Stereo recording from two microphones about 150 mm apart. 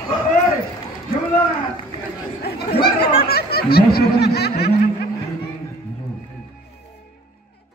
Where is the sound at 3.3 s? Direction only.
90° left.